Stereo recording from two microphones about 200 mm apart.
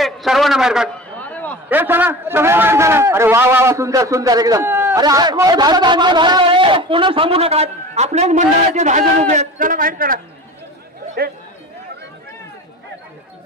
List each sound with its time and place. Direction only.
0.0 s a man's voice: centre (ahead or behind)
1.2 s a sound: 10° left (ahead or behind)
1.7 s a man's voice: 10° right (ahead or behind); by 10.2 s 45° right (ahead or behind)